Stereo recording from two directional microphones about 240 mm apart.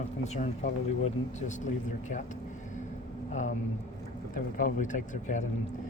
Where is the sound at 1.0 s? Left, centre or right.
Left.